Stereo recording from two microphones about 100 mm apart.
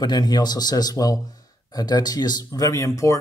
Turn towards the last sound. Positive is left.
turn(degrees=30)  # may be behind; listen again after turning